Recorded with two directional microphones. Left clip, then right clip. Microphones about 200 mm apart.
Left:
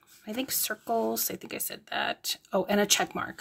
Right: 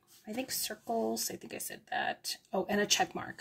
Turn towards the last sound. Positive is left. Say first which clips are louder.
# left 4 dB
turn(degrees=20)  # may be behind; listen again after turning